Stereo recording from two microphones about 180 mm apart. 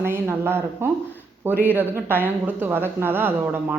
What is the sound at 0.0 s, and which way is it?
Speech, 15° right (ahead or behind).